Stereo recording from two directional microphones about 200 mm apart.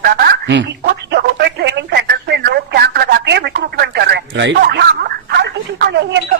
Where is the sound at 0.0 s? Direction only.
50° right (ahead or behind).